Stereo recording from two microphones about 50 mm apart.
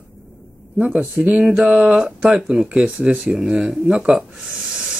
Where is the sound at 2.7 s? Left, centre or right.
Right.